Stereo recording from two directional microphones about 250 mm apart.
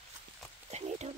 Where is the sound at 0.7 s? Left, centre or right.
Right.